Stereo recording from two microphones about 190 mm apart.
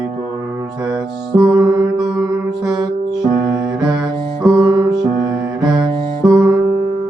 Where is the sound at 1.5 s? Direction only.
15° right (ahead or behind).